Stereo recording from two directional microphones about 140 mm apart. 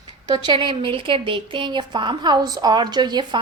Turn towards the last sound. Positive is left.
turn(degrees=-30)  # may be behind; listen again after turning